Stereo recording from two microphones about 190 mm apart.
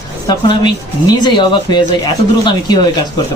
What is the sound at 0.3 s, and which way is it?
A man's voice, 20° left (ahead or behind).